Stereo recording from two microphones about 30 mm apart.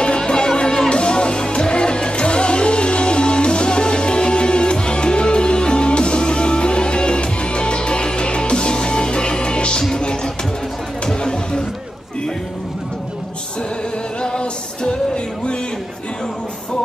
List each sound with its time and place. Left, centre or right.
0.2 s music: left
11.1 s chatter: left
14.2 s music: left